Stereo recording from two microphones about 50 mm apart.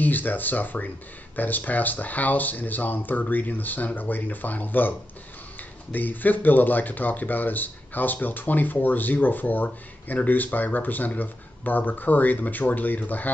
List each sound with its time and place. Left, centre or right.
0.0 s speech: left